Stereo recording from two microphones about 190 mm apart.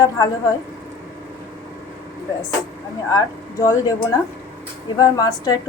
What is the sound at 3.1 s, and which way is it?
A woman's voice, 20° left (ahead or behind).